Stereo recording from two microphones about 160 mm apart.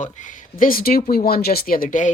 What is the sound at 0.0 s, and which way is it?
Speech, 50° left (ahead or behind).